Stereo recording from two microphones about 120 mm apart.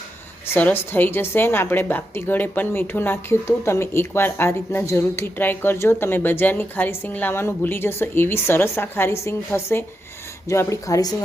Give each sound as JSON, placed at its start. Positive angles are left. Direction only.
{"t": 0.5, "sound": "a woman's voice", "side_deg": 15}